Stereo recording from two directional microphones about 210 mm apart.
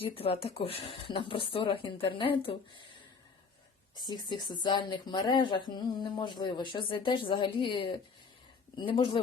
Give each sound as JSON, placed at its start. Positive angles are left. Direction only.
{"t": 0.2, "sound": "speech", "side_deg": 25}
{"t": 4.0, "sound": "speech", "side_deg": 20}